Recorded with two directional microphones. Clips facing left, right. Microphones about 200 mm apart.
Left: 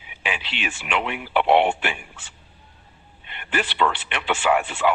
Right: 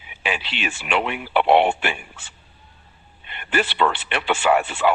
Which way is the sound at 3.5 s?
40° right (ahead or behind).